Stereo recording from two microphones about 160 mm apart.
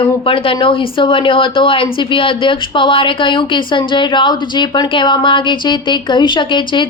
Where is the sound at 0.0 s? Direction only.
35° left (ahead or behind).